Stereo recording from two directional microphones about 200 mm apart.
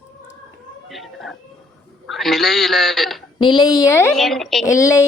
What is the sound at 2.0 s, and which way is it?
A man's voice, centre (ahead or behind).